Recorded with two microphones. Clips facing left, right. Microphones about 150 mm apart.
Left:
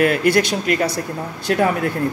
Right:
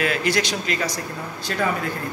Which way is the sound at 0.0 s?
55° left (ahead or behind).